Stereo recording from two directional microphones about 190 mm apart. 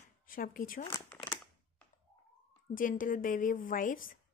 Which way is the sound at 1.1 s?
5° left (ahead or behind).